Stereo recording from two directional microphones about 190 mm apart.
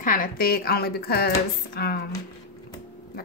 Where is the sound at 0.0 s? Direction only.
45° left (ahead or behind).